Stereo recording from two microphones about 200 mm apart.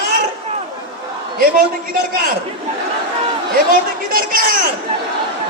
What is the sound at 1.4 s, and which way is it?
Speech, 45° right (ahead or behind).